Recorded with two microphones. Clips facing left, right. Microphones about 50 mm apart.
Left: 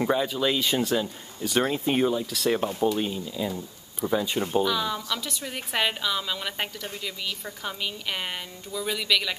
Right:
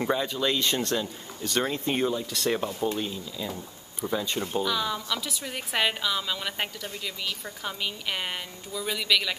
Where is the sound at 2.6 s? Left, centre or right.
Centre.